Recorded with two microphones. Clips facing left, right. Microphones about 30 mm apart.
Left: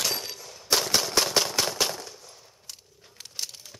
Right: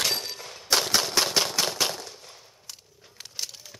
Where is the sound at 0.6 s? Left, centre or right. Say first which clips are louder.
Right 1 dB; centre.